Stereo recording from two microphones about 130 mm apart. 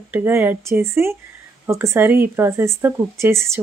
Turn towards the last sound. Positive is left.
turn(degrees=-20)  # may be behind; listen again after turning